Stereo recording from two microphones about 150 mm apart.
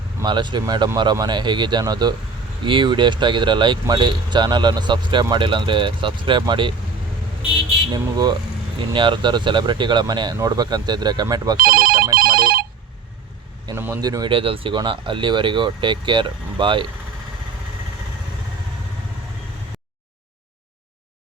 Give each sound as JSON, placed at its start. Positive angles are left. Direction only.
{"t": 0.2, "sound": "speech", "side_deg": -30}
{"t": 7.9, "sound": "speech", "side_deg": -25}
{"t": 11.5, "sound": "telephone bell ringing", "side_deg": -75}
{"t": 13.7, "sound": "speech", "side_deg": -15}